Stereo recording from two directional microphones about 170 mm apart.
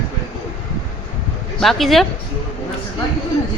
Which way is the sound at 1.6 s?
Centre (ahead or behind).